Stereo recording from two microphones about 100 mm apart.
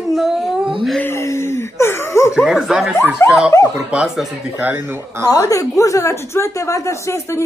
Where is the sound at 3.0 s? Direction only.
25° left (ahead or behind).